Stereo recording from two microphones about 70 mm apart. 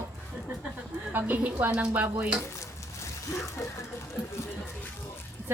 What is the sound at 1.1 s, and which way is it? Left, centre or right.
Speech, right.